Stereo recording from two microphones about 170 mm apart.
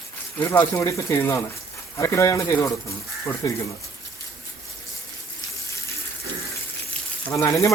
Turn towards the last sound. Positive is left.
turn(degrees=20)  # may be behind; listen again after turning